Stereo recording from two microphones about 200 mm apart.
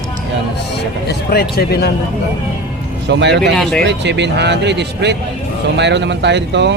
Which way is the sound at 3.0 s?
60° right (ahead or behind).